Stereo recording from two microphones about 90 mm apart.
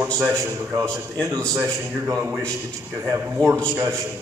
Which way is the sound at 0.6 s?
30° right (ahead or behind).